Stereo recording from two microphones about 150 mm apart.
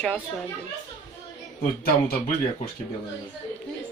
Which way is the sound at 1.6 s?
70° left (ahead or behind).